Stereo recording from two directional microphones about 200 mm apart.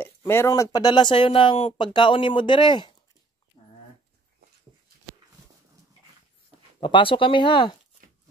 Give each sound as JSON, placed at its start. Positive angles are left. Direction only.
{"t": 0.3, "sound": "speech", "side_deg": 15}
{"t": 6.8, "sound": "speech", "side_deg": 25}